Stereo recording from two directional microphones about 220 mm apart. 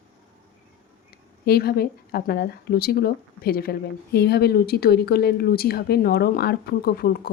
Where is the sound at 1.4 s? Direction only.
45° left (ahead or behind).